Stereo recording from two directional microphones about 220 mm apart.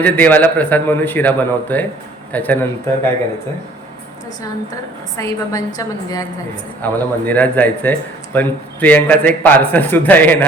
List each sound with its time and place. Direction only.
0.0 s a man's voice: 10° left (ahead or behind)
5.1 s a man's voice: 15° left (ahead or behind)